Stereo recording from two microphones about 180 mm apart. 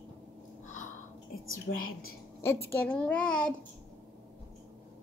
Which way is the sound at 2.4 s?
15° left (ahead or behind).